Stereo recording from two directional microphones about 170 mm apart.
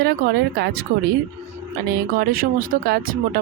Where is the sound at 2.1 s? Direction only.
55° right (ahead or behind).